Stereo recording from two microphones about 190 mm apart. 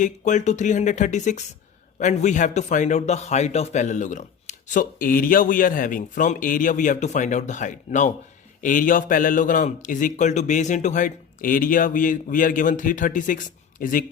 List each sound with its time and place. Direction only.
0.0 s a man's voice: 40° left (ahead or behind)